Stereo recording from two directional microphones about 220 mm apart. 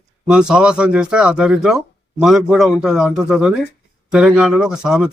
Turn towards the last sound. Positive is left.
turn(degrees=-5)  # may be behind; listen again after turning